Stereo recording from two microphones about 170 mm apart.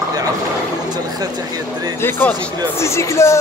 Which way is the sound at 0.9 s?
25° right (ahead or behind).